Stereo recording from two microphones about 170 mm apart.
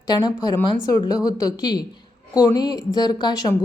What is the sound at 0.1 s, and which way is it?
A woman's voice, 25° left (ahead or behind).